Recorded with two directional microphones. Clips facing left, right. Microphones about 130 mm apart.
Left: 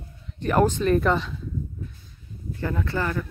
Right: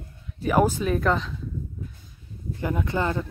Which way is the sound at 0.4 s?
5° right (ahead or behind).